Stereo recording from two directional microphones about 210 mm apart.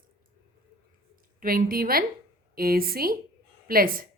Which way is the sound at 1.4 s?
45° right (ahead or behind).